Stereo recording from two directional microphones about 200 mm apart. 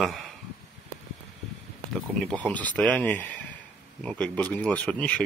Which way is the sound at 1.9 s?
5° left (ahead or behind).